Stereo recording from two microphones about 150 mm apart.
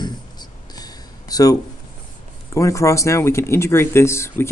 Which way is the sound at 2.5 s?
20° left (ahead or behind).